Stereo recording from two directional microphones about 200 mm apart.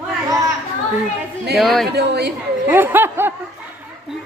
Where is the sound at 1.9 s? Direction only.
55° right (ahead or behind).